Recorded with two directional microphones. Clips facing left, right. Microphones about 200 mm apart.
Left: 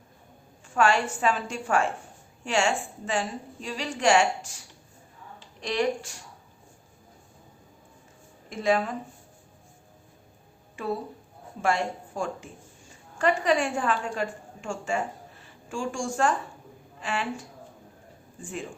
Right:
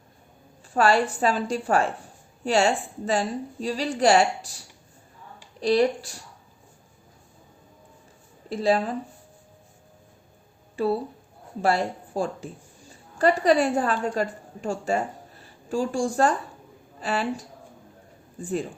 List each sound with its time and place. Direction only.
0.7 s a woman's voice: 35° right (ahead or behind)
8.4 s a woman's voice: 35° right (ahead or behind)
10.8 s a woman's voice: 35° right (ahead or behind)
18.4 s a woman's voice: 35° right (ahead or behind)